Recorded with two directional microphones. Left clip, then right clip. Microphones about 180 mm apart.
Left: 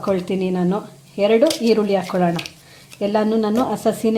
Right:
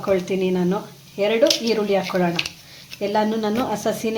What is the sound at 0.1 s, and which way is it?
Speech, 50° left (ahead or behind).